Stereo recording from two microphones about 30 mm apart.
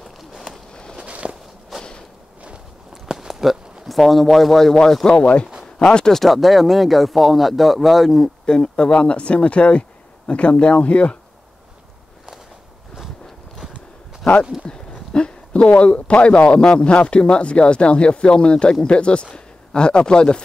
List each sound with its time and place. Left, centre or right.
0.2 s a sound: centre
0.9 s walk: right
2.9 s a sound: centre
5.0 s speech: left
6.1 s speech: centre
8.5 s speech: left
14.7 s speech: left
15.1 s a sound: left
15.8 s speech: left